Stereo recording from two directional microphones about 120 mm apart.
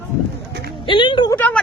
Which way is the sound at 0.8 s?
45° left (ahead or behind).